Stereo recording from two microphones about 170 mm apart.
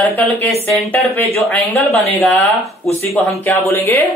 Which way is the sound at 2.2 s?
10° left (ahead or behind).